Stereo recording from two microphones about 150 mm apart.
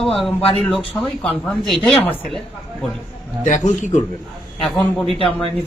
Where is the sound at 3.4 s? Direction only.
55° left (ahead or behind).